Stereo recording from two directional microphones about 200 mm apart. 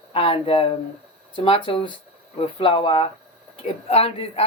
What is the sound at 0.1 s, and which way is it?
Speech, 30° left (ahead or behind).